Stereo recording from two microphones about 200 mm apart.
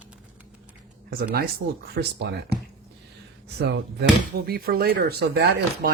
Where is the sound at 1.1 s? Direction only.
50° right (ahead or behind).